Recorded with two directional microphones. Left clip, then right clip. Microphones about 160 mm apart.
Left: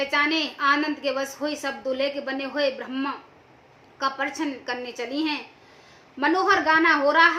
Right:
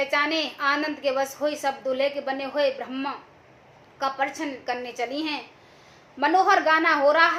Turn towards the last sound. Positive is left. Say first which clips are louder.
# left 1 dB
turn(degrees=15)  # may be behind; listen again after turning